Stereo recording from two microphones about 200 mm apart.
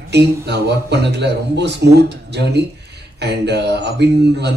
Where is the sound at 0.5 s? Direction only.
55° right (ahead or behind).